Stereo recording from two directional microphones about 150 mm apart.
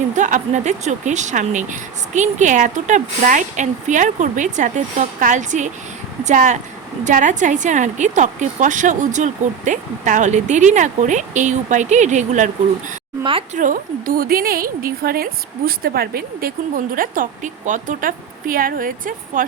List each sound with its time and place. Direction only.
0.2 s speech: 55° right (ahead or behind)
13.5 s a woman's voice: 60° right (ahead or behind)